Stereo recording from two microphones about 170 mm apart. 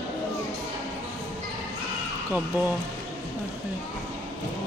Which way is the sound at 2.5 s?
10° right (ahead or behind).